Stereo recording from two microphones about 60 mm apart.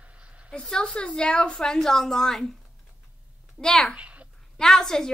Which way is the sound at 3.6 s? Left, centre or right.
Centre.